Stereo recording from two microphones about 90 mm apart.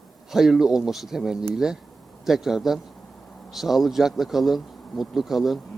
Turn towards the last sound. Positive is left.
turn(degrees=0)  # may be behind; listen again after turning